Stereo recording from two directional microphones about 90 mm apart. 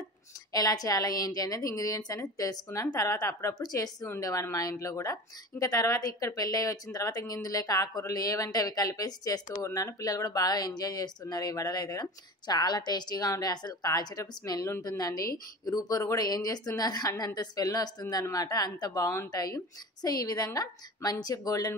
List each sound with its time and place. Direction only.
0.5 s a woman's voice: 45° left (ahead or behind)